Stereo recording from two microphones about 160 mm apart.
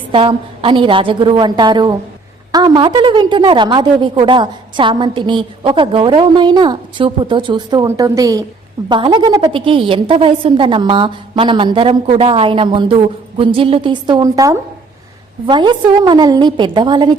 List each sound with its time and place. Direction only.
0.1 s a woman's voice: 35° right (ahead or behind)